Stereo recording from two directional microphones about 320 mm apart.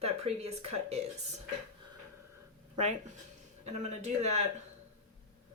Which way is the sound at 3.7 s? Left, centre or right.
Right.